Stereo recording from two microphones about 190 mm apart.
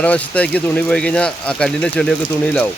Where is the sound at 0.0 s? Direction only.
5° left (ahead or behind).